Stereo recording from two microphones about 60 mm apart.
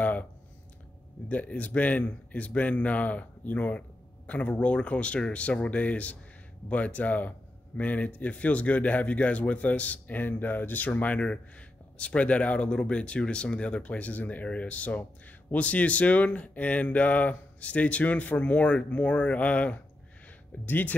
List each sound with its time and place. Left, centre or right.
0.0 s a sound: left
1.3 s speech: left
10.9 s speech: left